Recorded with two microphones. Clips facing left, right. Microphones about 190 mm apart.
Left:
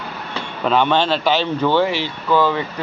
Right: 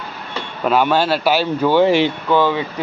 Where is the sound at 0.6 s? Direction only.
5° right (ahead or behind).